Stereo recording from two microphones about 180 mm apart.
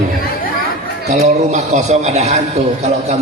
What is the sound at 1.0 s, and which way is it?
A man's voice, 40° right (ahead or behind).